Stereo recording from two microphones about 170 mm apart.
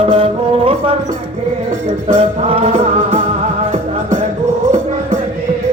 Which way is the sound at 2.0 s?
35° right (ahead or behind).